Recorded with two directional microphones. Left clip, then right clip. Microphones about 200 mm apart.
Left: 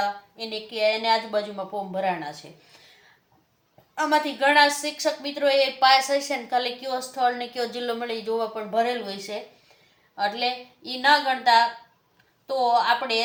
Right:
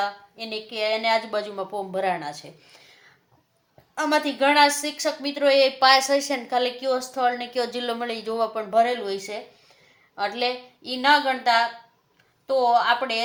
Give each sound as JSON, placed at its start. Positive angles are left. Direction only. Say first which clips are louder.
{"t": 0.0, "sound": "a woman's voice", "louder": "left 1 dB", "side_deg": -30}
{"t": 3.9, "sound": "a woman's voice", "louder": "even", "side_deg": -35}